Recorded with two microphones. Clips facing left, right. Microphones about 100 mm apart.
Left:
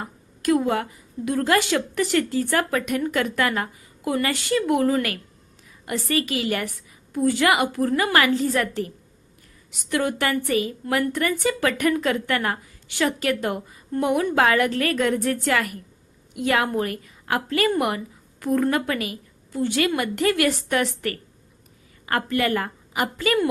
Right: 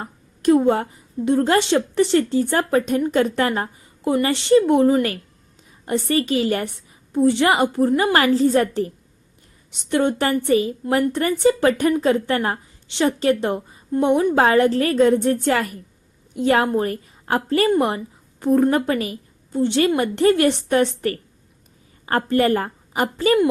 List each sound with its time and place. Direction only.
0.0 s a woman's voice: 30° right (ahead or behind)